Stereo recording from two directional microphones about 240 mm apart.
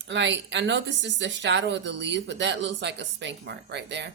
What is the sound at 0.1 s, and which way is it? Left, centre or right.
Speech, right.